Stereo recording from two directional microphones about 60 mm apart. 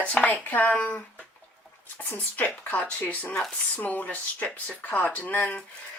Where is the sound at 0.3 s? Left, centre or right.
Left.